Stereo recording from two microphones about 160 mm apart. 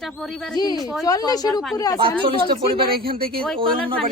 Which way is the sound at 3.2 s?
70° right (ahead or behind).